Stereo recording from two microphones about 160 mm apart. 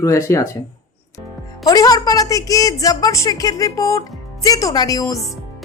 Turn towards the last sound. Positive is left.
turn(degrees=20)  # may be behind; listen again after turning